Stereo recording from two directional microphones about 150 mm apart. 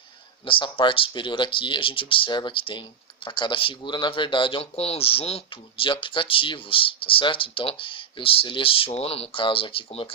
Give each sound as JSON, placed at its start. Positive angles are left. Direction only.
{"t": 0.4, "sound": "speech", "side_deg": 35}